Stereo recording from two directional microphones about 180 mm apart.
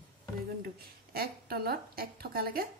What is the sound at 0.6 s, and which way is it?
A woman's voice, 60° right (ahead or behind).